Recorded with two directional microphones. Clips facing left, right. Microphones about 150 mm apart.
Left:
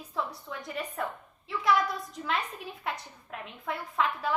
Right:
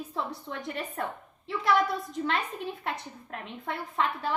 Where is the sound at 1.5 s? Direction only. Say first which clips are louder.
Right 1 dB; centre (ahead or behind).